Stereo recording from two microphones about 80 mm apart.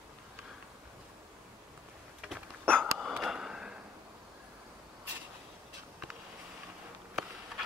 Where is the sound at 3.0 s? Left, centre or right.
Centre.